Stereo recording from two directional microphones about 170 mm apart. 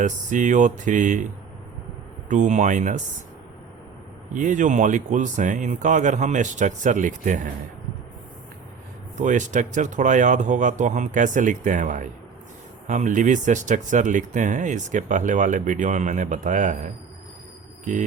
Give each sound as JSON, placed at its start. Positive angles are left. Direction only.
{"t": 0.0, "sound": "speech", "side_deg": -50}
{"t": 2.3, "sound": "speech", "side_deg": -45}
{"t": 4.4, "sound": "speech", "side_deg": -50}
{"t": 9.1, "sound": "speech", "side_deg": -45}